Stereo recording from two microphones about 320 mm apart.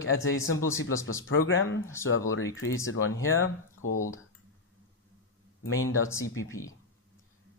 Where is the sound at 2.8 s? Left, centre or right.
Left.